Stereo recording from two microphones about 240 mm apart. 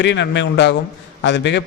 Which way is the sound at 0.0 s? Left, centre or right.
Left.